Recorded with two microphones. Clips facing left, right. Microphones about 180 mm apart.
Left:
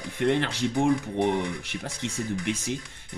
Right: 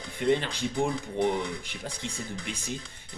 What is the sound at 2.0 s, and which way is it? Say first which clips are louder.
Speech: left 6 dB; 20° left (ahead or behind).